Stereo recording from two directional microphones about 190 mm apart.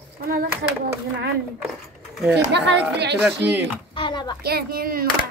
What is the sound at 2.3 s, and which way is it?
A woman's voice, 65° right (ahead or behind).